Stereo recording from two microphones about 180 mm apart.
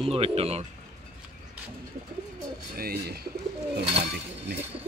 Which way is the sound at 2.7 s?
55° right (ahead or behind).